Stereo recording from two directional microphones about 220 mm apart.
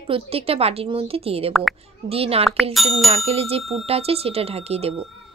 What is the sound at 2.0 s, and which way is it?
Speech, 25° right (ahead or behind).